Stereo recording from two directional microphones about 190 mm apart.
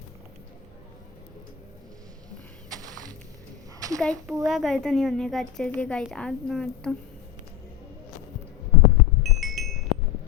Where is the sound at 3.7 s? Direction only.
15° right (ahead or behind).